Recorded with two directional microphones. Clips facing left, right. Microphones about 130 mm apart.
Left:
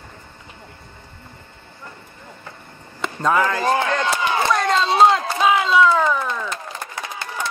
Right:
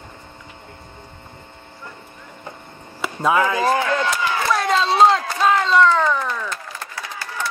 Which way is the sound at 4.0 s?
20° left (ahead or behind).